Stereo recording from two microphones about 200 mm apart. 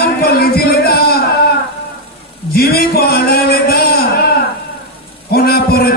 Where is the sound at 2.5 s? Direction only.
50° left (ahead or behind).